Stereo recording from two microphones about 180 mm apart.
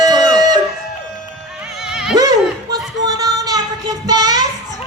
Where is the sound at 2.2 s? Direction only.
20° right (ahead or behind).